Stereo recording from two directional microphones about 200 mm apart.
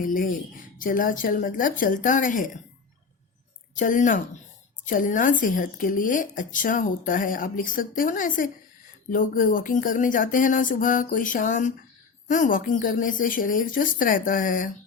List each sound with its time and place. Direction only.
0.0 s a woman's voice: 45° left (ahead or behind)
3.8 s a woman's voice: 40° left (ahead or behind)